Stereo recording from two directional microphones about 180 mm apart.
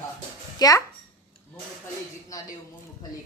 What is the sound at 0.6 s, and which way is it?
Speech, 20° left (ahead or behind).